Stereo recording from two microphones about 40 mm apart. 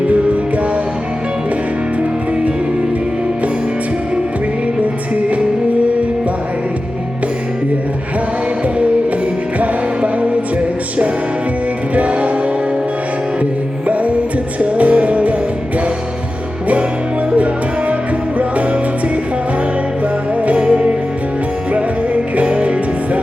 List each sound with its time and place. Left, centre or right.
0.1 s music: right
8.6 s music: right
11.9 s music: right
13.4 s music: right
17.3 s music: right
20.4 s music: right
20.7 s music: right
21.7 s music: right